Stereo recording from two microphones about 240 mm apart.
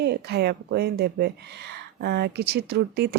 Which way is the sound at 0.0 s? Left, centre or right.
Right.